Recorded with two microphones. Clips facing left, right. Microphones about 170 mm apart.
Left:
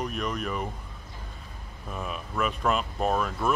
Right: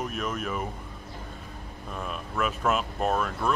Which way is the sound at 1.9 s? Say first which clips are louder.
Left 1 dB; centre (ahead or behind).